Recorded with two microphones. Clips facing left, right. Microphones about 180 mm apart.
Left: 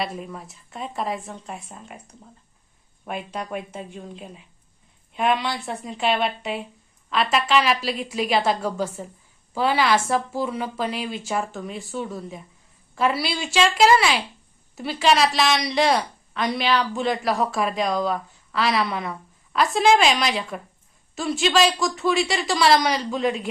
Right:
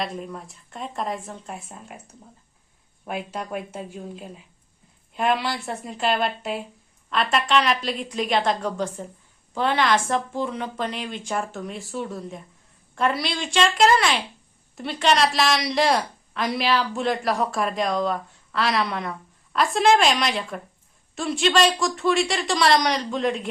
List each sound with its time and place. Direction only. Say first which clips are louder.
0.0 s a woman's voice: even; 5° left (ahead or behind)